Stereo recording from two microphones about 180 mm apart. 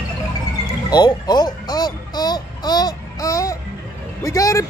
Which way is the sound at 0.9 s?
25° left (ahead or behind).